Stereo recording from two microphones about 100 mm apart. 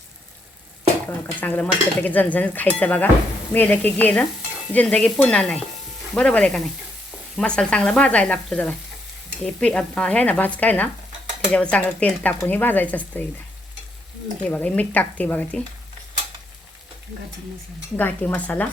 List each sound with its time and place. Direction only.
1.0 s cutlery: 15° left (ahead or behind)
14.4 s cutlery: 10° left (ahead or behind)
17.9 s cutlery: 20° left (ahead or behind)